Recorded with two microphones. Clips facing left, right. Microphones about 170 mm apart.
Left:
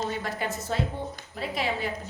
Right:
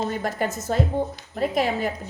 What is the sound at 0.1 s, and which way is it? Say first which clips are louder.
A woman's voice: right 5 dB; 45° right (ahead or behind).